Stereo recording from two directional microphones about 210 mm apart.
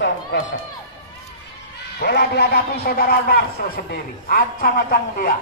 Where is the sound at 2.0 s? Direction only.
50° left (ahead or behind).